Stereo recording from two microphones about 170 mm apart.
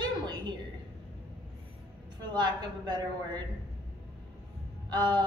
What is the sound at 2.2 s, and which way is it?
A woman's voice, 25° right (ahead or behind).